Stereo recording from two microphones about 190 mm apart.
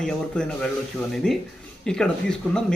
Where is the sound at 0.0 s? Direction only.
5° left (ahead or behind).